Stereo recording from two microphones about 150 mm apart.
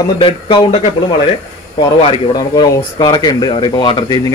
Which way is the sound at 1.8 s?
35° left (ahead or behind).